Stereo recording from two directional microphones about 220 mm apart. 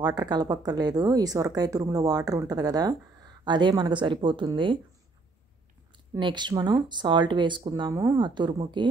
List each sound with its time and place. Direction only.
0.0 s speech: 15° right (ahead or behind)
6.1 s speech: 20° right (ahead or behind)